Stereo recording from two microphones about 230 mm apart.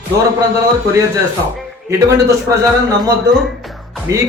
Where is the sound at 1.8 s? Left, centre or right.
Centre.